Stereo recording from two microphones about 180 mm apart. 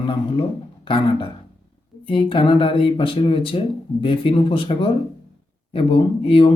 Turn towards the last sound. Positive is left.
turn(degrees=30)  # may be behind; listen again after turning